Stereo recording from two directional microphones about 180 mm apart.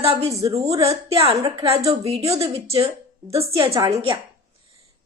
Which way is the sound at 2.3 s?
15° right (ahead or behind).